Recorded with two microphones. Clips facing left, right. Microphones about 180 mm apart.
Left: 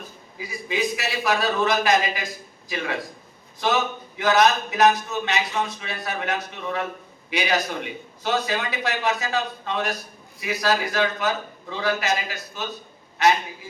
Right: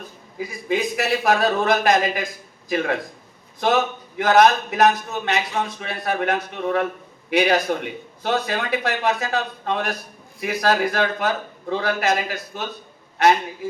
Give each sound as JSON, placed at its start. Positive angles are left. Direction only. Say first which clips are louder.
{"t": 0.3, "sound": "a man's voice", "louder": "right 4 dB", "side_deg": -55}